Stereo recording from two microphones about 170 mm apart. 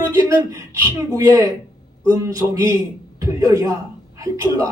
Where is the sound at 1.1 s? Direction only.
20° right (ahead or behind).